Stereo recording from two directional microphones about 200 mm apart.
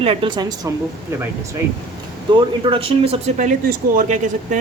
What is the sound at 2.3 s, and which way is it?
Speech, 25° right (ahead or behind).